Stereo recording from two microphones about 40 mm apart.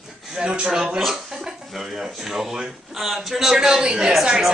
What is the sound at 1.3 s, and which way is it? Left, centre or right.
A man's voice, centre.